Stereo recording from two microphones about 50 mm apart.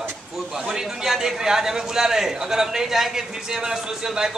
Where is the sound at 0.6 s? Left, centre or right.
Centre.